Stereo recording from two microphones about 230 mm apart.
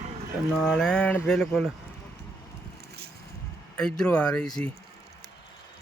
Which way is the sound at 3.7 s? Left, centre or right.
Centre.